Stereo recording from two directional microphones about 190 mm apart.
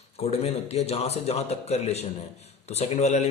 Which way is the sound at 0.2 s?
35° left (ahead or behind).